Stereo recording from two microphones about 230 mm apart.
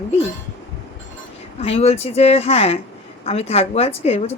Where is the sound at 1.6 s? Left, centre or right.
Left.